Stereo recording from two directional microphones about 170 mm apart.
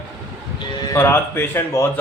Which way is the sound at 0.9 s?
15° left (ahead or behind).